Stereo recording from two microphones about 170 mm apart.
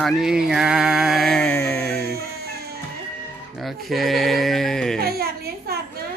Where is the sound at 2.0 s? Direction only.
70° right (ahead or behind).